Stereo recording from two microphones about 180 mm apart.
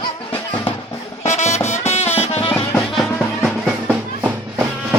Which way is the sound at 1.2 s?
40° left (ahead or behind).